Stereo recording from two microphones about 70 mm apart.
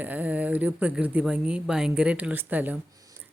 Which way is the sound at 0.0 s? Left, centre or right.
Right.